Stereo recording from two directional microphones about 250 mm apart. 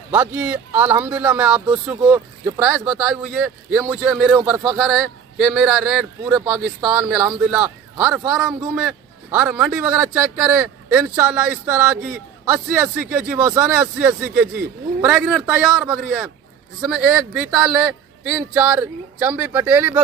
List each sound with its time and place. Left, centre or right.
0.1 s speech: centre